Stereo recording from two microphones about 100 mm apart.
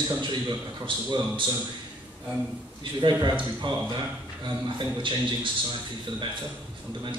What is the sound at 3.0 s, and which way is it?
A man's voice, 50° right (ahead or behind).